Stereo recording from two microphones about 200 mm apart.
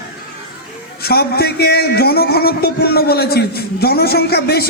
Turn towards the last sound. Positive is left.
turn(degrees=50)  # may be behind; listen again after turning